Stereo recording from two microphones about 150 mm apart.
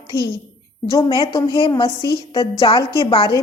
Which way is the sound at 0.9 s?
20° left (ahead or behind).